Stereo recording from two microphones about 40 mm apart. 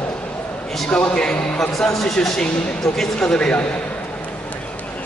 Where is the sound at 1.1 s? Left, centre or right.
Left.